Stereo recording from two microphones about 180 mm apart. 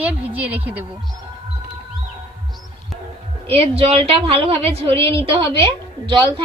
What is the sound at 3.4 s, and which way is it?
A woman's voice, 35° right (ahead or behind).